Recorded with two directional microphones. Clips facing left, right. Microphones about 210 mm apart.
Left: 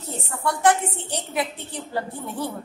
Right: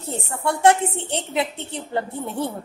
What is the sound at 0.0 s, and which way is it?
A woman's voice, 25° right (ahead or behind).